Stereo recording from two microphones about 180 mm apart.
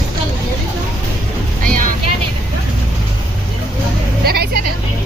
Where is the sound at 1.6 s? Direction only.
50° right (ahead or behind).